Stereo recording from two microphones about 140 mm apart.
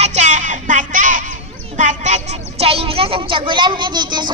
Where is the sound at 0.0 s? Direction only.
55° right (ahead or behind).